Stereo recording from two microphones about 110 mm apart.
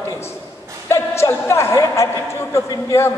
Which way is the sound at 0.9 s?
25° left (ahead or behind).